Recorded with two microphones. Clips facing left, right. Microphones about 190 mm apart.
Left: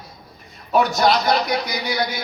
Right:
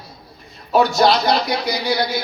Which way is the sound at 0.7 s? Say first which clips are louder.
Right 2 dB; 30° right (ahead or behind).